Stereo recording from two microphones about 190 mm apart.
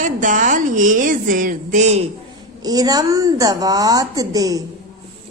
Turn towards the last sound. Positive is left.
turn(degrees=-20)  # may be behind; listen again after turning